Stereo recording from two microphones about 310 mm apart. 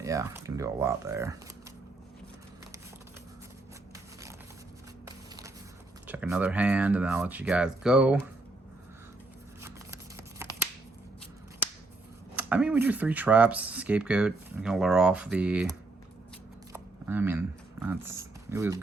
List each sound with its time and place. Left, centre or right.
0.0 s speech: centre
6.1 s speech: centre
9.6 s scissors: centre
12.4 s speech: centre
16.7 s shuffling cards: centre
17.8 s speech: centre